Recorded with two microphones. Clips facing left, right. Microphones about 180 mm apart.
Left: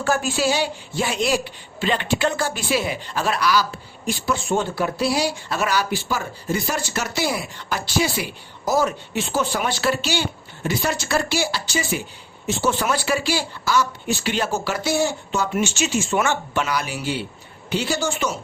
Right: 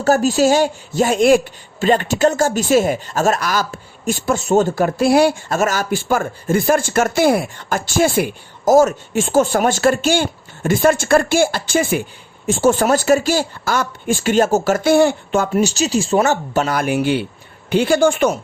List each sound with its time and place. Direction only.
0.0 s speech: 40° right (ahead or behind); by 15.4 s 55° right (ahead or behind)
15.5 s speech: 35° right (ahead or behind); by 18.3 s 55° right (ahead or behind)